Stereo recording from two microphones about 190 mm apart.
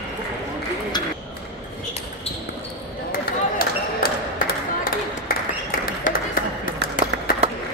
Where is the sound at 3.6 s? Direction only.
50° left (ahead or behind).